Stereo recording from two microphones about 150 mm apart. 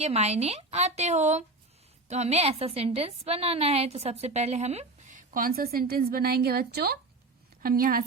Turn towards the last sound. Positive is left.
turn(degrees=-75)  # may be behind; listen again after turning